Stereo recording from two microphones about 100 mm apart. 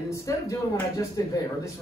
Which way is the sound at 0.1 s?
30° left (ahead or behind).